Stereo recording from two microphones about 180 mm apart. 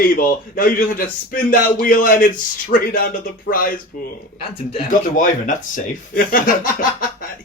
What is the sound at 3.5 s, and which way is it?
Speech, 80° left.